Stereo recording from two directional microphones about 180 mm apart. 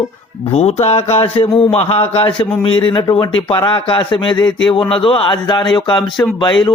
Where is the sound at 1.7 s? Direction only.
35° left (ahead or behind).